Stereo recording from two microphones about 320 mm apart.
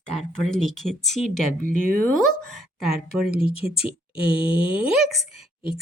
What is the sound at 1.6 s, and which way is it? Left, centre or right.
Speech, right.